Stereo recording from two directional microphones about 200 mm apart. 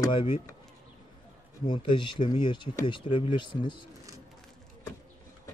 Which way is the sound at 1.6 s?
20° left (ahead or behind).